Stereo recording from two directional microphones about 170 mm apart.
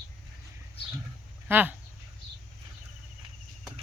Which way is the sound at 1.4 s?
10° right (ahead or behind).